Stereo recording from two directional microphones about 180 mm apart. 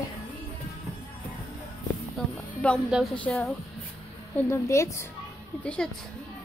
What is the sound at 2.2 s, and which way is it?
Music, 5° left (ahead or behind).